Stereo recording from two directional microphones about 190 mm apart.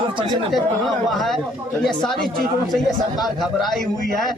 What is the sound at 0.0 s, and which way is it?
Chatter, 25° right (ahead or behind).